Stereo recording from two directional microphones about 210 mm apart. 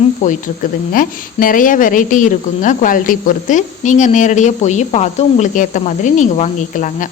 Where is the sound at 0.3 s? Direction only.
40° left (ahead or behind).